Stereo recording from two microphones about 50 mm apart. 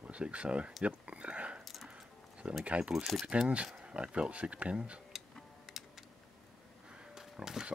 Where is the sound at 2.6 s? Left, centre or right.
Centre.